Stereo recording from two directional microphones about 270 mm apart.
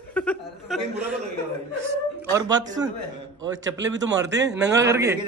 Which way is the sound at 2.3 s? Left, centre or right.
Centre.